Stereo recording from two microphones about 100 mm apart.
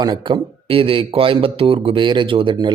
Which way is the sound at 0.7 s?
65° right (ahead or behind).